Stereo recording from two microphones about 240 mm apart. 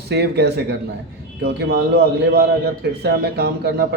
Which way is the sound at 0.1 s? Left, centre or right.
Right.